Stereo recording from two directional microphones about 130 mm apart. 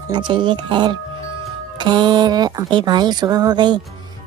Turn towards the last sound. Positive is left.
turn(degrees=-35)  # may be behind; listen again after turning